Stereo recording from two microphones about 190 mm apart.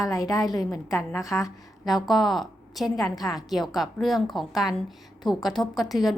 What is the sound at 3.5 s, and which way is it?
A woman's voice, centre (ahead or behind).